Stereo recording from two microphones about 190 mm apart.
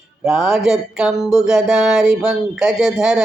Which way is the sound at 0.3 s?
5° right (ahead or behind).